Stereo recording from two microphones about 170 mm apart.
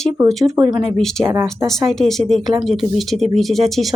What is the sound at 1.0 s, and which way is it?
A woman's voice, 5° left (ahead or behind).